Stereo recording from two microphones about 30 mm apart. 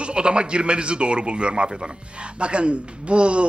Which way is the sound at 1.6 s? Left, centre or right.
Right.